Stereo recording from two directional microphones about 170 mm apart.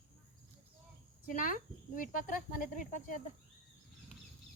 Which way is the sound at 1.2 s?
50° left (ahead or behind).